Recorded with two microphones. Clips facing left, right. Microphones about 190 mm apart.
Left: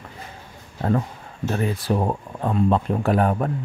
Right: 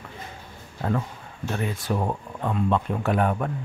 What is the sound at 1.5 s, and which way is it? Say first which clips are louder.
Speech: left 4 dB; 35° left (ahead or behind).